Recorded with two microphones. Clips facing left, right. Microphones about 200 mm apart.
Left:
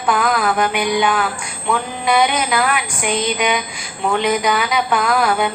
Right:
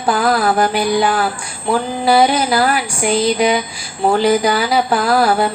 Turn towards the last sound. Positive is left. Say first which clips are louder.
# right 3 dB
turn(degrees=-35)  # may be behind; listen again after turning